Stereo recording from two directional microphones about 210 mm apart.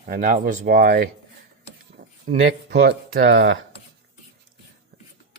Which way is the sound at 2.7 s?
50° right (ahead or behind).